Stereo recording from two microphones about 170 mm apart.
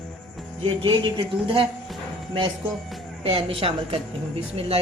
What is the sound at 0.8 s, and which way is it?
A woman's voice, 30° right (ahead or behind).